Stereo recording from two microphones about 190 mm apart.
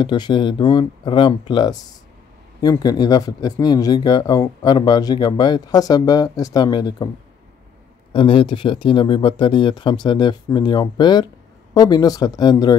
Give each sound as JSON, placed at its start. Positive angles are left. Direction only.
{"t": 0.0, "sound": "speech", "side_deg": 25}
{"t": 8.1, "sound": "speech", "side_deg": 25}